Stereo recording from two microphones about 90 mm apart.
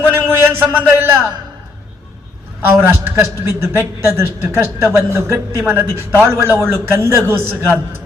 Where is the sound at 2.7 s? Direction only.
30° right (ahead or behind).